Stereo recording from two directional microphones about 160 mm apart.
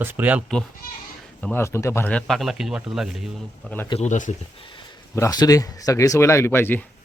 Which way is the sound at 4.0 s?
50° left (ahead or behind).